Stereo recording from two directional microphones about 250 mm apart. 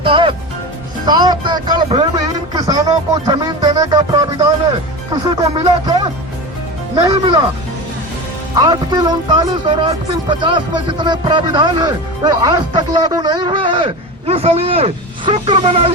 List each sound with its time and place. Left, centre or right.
0.0 s music: right
1.0 s speech: centre
8.5 s speech: centre